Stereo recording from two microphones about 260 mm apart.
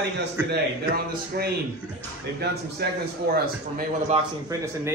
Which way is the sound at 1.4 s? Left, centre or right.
Right.